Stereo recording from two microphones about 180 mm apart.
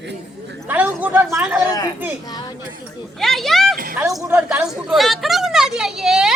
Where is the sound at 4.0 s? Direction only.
10° right (ahead or behind).